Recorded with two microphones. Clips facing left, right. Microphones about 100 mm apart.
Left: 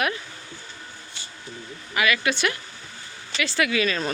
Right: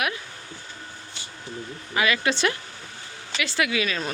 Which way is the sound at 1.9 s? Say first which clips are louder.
Even; 25° right (ahead or behind).